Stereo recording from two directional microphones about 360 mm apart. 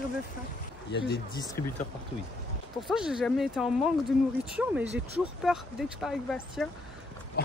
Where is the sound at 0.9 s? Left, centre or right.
Left.